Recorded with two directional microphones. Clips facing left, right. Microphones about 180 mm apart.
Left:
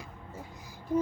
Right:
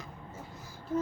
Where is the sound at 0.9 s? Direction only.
15° left (ahead or behind).